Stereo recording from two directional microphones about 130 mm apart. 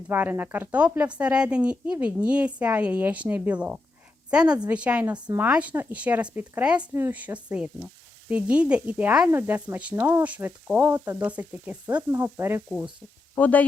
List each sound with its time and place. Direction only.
0.1 s speech: 15° right (ahead or behind)
13.3 s speech: 10° left (ahead or behind)